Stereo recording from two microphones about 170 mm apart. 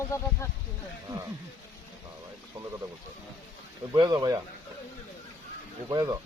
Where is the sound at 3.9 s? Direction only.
25° right (ahead or behind).